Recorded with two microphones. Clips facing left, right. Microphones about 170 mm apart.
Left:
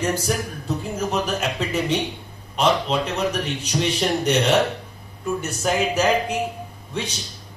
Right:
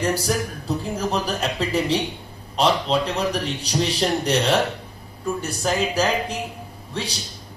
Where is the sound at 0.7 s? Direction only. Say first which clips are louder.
Left 1 dB; 35° right (ahead or behind).